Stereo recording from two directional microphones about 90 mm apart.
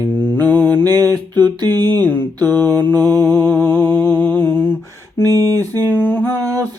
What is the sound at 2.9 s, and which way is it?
Mantra, 45° right (ahead or behind).